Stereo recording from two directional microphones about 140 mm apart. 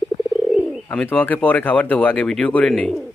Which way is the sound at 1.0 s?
15° left (ahead or behind).